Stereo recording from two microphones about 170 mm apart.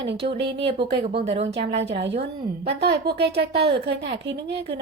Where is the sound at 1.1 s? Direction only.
40° right (ahead or behind).